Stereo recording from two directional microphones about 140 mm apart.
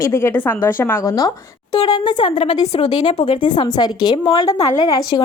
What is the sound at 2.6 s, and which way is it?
Speech, 50° left (ahead or behind).